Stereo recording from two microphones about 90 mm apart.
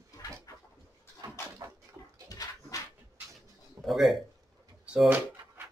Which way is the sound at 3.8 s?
Centre (ahead or behind).